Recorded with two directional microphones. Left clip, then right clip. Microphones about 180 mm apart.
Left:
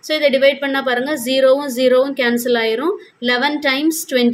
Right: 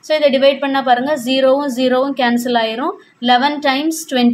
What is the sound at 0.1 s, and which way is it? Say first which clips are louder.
A woman's voice: right 2 dB; 15° left (ahead or behind).